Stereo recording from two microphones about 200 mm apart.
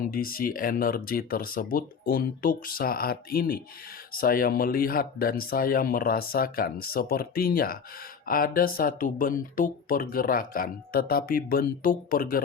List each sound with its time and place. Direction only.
0.1 s speech: 45° left (ahead or behind)